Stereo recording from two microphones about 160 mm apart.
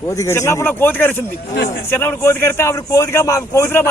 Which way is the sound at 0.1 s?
20° left (ahead or behind).